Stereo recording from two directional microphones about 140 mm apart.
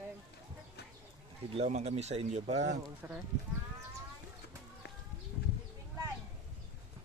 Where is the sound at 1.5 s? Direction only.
50° right (ahead or behind).